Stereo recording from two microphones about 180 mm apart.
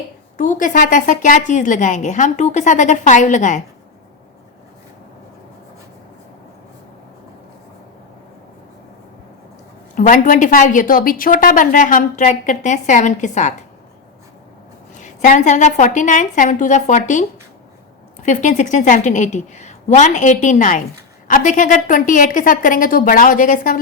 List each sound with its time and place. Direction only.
0.3 s a woman's voice: 45° left (ahead or behind)
9.9 s a woman's voice: 45° left (ahead or behind)
15.0 s a woman's voice: 40° left (ahead or behind)